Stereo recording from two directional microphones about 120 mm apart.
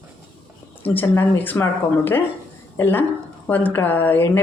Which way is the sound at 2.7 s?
15° left (ahead or behind).